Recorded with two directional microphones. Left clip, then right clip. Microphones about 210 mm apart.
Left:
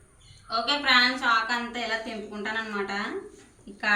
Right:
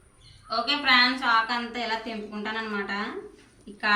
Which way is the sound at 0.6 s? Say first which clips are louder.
Right 1 dB; 5° left (ahead or behind).